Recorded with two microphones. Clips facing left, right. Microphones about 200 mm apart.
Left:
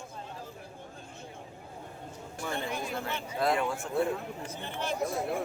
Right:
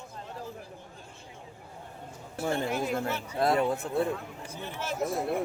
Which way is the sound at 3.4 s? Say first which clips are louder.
Right 3 dB; 40° right (ahead or behind).